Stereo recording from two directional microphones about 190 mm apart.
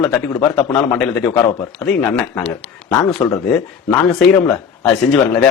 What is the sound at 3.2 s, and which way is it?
Speech, 10° left (ahead or behind).